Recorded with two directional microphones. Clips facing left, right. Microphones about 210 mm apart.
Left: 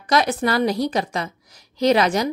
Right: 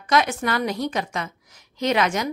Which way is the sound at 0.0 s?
35° left (ahead or behind).